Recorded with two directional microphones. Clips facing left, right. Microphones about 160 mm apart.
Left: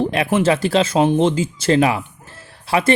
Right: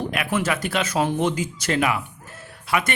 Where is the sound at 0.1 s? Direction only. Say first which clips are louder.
Left 7 dB; 30° left (ahead or behind).